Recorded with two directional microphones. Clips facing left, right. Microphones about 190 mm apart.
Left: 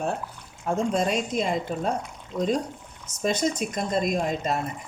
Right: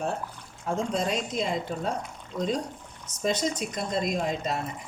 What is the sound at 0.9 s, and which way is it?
Speech, 50° left (ahead or behind).